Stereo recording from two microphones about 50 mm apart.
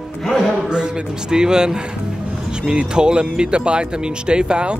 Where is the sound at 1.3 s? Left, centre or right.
Centre.